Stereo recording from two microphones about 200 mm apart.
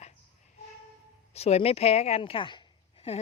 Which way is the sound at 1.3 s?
30° left (ahead or behind).